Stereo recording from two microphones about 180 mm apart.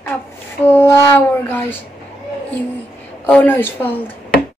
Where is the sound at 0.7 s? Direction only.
15° left (ahead or behind).